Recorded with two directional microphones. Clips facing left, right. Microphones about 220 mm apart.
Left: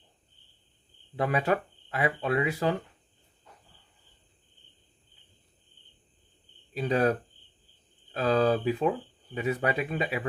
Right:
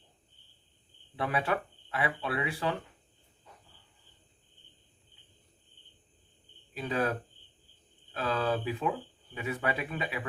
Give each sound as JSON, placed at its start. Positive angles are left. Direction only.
{"t": 1.1, "sound": "speech", "side_deg": 40}
{"t": 6.7, "sound": "speech", "side_deg": 35}